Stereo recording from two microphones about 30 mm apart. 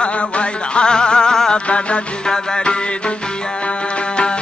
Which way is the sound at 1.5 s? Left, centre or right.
Left.